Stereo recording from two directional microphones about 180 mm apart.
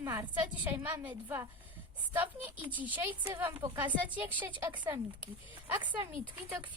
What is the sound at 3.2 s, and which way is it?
Speech, 20° right (ahead or behind).